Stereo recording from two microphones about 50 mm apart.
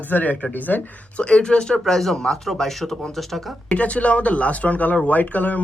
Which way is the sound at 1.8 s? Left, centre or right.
Centre.